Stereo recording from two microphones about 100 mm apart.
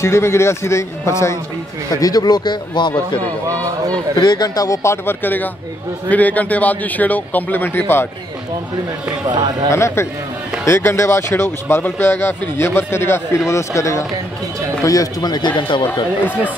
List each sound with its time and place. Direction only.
0.0 s speech: 25° left (ahead or behind)
2.0 s speech: 40° left (ahead or behind)
4.2 s a man's voice: 45° left (ahead or behind); by 8.1 s 20° left (ahead or behind)
9.3 s speech: 45° right (ahead or behind)
9.7 s speech: 30° left (ahead or behind); by 15.9 s 50° left (ahead or behind)
15.9 s speech: 20° left (ahead or behind)